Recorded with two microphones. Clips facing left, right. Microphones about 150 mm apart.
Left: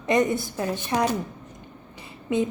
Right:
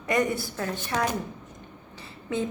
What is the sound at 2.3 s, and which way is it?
Speech, 15° left (ahead or behind).